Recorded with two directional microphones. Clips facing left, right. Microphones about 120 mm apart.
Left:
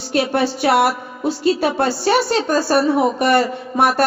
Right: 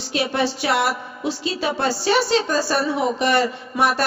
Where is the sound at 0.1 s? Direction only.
50° left (ahead or behind).